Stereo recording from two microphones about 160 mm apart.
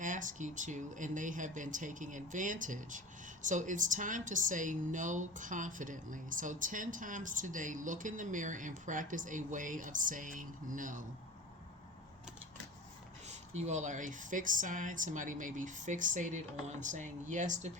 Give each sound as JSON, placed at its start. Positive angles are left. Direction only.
{"t": 0.0, "sound": "speech", "side_deg": -55}
{"t": 13.2, "sound": "speech", "side_deg": -45}